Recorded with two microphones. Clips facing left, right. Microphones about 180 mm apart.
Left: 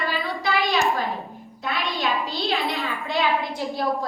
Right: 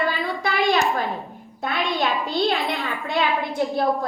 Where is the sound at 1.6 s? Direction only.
50° right (ahead or behind).